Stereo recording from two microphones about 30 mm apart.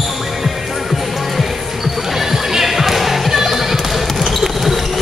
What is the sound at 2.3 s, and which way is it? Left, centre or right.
Music, centre.